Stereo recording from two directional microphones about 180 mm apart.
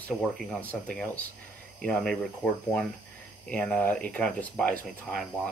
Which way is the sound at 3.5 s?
10° left (ahead or behind).